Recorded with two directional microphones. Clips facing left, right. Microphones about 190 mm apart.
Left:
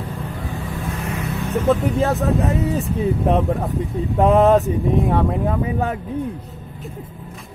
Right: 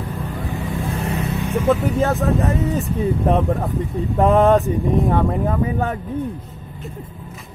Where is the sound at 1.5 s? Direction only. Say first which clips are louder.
Even; 10° right (ahead or behind).